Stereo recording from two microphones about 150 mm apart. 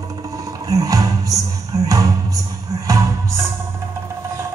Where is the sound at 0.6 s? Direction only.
20° right (ahead or behind).